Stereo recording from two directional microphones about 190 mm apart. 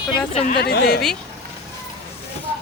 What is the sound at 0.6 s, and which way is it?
Speech, 55° left (ahead or behind).